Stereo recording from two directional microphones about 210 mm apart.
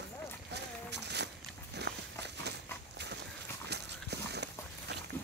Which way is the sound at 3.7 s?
55° right (ahead or behind).